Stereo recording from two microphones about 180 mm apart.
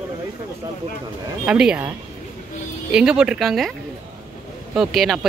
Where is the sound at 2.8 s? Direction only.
5° right (ahead or behind).